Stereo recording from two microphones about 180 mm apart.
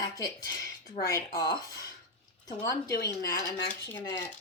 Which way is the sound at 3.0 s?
20° left (ahead or behind).